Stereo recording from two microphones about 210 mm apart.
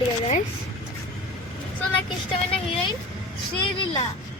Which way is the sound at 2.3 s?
25° left (ahead or behind).